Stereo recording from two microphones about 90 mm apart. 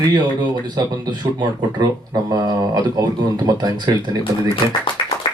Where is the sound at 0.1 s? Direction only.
55° right (ahead or behind).